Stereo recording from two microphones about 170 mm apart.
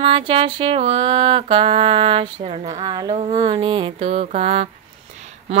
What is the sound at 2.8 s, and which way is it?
Speech, 25° right (ahead or behind).